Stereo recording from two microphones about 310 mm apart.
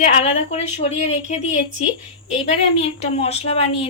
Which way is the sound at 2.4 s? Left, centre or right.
Centre.